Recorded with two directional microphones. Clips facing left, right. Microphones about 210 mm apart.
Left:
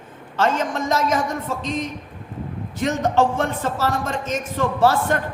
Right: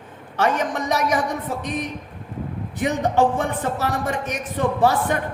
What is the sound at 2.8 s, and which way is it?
A man's voice, 15° right (ahead or behind).